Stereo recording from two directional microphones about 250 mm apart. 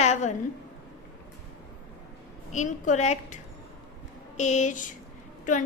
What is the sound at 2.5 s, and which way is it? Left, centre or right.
Speech, left.